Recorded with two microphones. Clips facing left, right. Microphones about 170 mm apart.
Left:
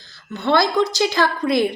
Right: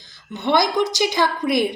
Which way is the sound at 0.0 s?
20° right (ahead or behind).